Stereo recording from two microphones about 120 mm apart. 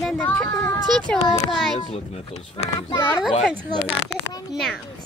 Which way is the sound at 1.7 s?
55° left (ahead or behind).